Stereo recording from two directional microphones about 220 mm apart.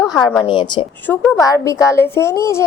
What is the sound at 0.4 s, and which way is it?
Speech, 20° left (ahead or behind).